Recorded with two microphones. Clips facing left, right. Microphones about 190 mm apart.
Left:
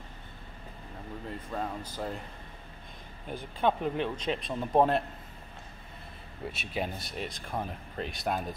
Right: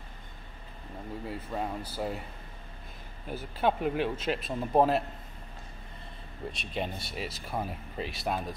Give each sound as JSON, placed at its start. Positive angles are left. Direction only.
{"t": 1.2, "sound": "speech", "side_deg": -5}
{"t": 3.3, "sound": "speech", "side_deg": -5}
{"t": 6.4, "sound": "speech", "side_deg": 5}